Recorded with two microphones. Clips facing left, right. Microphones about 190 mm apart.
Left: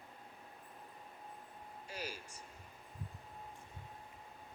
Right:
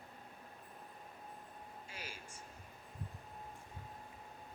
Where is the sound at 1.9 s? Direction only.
40° left (ahead or behind).